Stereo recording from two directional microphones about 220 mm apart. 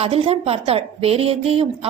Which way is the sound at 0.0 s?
25° right (ahead or behind).